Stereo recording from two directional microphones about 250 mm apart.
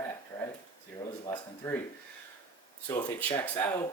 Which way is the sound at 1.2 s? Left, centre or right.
Centre.